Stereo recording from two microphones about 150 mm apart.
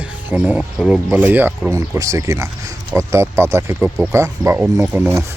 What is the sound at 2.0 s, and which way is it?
Speech, 20° right (ahead or behind).